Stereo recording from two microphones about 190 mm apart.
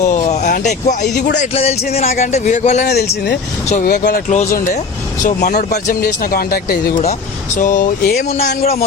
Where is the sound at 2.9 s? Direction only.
55° left (ahead or behind).